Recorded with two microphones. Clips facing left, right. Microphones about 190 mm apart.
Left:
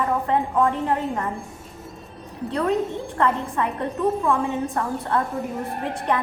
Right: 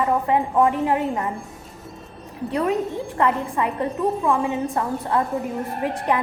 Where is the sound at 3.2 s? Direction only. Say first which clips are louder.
Right 1 dB; 15° right (ahead or behind).